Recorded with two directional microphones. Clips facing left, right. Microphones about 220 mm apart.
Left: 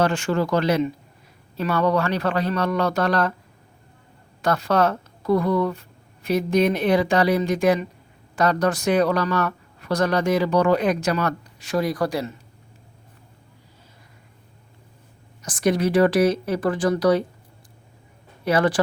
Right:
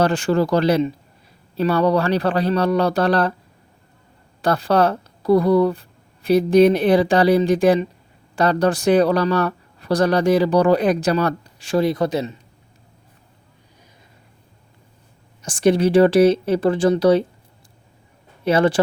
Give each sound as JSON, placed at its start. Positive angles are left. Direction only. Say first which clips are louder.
{"t": 0.0, "sound": "speech", "louder": "right 4 dB", "side_deg": -35}
{"t": 4.4, "sound": "a woman's voice", "louder": "right 3 dB", "side_deg": -30}
{"t": 15.4, "sound": "speech", "louder": "right 5 dB", "side_deg": -30}
{"t": 18.4, "sound": "speech", "louder": "right 3 dB", "side_deg": -25}